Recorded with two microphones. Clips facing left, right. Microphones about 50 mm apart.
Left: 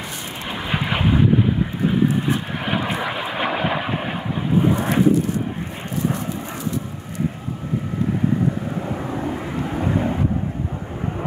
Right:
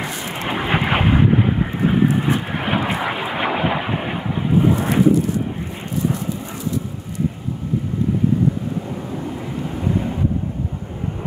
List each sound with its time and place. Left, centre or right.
0.5 s vehicle: right; by 5.1 s centre
8.8 s vehicle: left